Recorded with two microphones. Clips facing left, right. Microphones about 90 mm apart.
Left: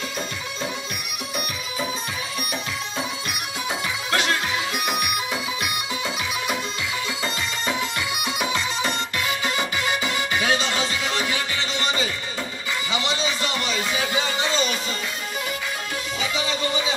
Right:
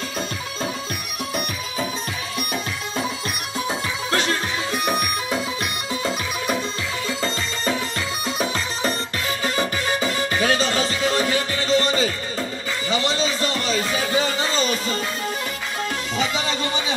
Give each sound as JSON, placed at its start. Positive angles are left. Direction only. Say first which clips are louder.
{"t": 4.1, "sound": "music", "louder": "even", "side_deg": -35}
{"t": 8.3, "sound": "music", "louder": "right 1 dB", "side_deg": -35}
{"t": 12.9, "sound": "a sound", "louder": "right 4 dB", "side_deg": -35}